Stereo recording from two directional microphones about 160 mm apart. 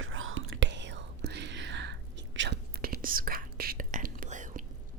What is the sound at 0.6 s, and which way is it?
Whispering, 90° right.